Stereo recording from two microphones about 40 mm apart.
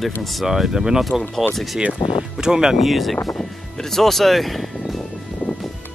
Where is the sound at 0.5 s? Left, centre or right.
Centre.